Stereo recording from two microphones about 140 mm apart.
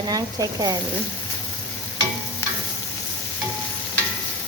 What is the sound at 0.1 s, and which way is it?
Speech, 25° right (ahead or behind).